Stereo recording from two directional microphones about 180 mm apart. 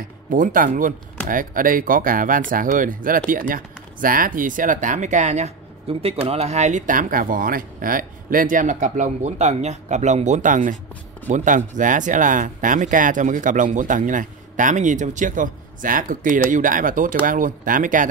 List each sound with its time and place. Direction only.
0.3 s speech: 50° right (ahead or behind)